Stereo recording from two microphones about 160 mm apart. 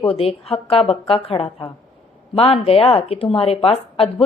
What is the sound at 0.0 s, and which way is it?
Speech, 35° left (ahead or behind).